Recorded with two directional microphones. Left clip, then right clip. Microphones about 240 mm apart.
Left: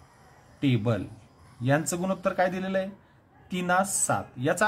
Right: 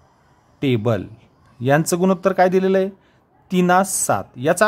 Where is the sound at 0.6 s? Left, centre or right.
Right.